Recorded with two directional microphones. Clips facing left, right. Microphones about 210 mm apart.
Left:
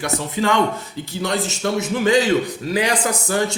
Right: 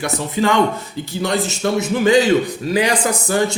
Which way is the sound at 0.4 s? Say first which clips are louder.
Right 3 dB; 15° right (ahead or behind).